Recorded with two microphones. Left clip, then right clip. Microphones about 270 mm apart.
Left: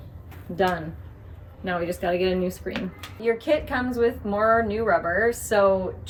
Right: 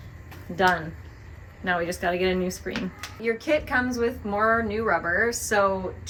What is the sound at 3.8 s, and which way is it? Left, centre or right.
A woman's voice, centre.